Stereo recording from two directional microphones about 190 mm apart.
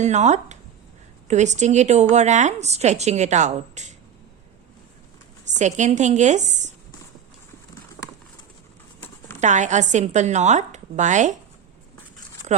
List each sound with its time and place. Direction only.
0.0 s a woman's voice: 35° right (ahead or behind)
5.5 s a woman's voice: 40° right (ahead or behind)
9.4 s a woman's voice: 40° right (ahead or behind)